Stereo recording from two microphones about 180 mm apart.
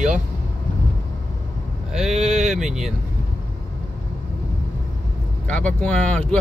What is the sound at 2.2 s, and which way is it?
Speech, 40° right (ahead or behind).